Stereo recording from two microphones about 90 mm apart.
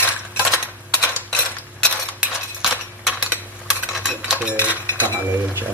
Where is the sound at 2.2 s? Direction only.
10° right (ahead or behind).